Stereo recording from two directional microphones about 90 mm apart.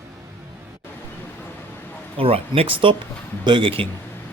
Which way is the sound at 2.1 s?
90° right.